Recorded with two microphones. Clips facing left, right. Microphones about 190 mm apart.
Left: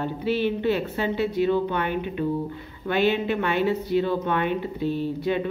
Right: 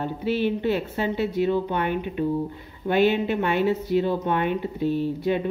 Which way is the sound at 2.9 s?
45° right (ahead or behind).